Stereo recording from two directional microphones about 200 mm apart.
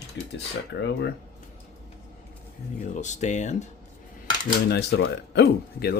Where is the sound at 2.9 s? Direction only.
35° left (ahead or behind).